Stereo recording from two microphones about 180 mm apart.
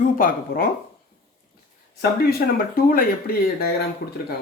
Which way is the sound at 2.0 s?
60° left (ahead or behind).